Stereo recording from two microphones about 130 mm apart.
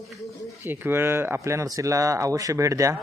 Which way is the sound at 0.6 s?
15° right (ahead or behind).